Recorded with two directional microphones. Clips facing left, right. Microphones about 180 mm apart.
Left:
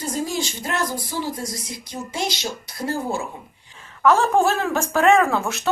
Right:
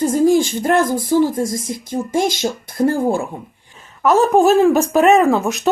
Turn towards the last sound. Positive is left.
turn(degrees=-15)  # may be behind; listen again after turning